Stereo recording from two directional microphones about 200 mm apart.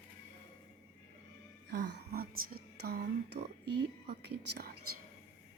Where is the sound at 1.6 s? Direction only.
60° right (ahead or behind).